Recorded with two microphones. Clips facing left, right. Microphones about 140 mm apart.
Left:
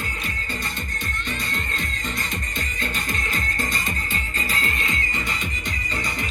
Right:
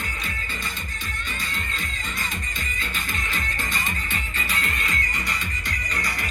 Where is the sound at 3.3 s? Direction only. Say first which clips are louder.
Left 1 dB; 40° left (ahead or behind); by 6.1 s 25° left (ahead or behind).